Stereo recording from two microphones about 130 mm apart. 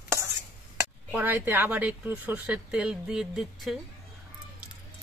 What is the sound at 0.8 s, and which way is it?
Speech, 15° right (ahead or behind).